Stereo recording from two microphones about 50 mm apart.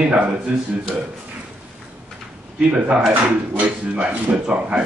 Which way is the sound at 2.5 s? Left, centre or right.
Right.